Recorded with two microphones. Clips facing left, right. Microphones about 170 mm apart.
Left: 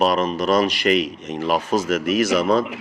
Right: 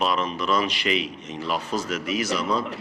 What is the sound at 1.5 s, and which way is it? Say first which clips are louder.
A man's voice: left 7 dB; 90° left.